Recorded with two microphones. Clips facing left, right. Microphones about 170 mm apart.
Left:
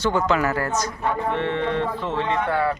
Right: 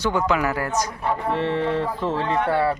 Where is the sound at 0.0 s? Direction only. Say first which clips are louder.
Left 1 dB; 10° right (ahead or behind).